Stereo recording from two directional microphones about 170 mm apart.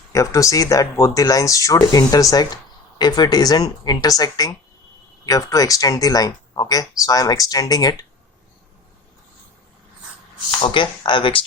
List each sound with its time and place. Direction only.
0.1 s speech: 20° left (ahead or behind)
10.6 s speech: 30° left (ahead or behind)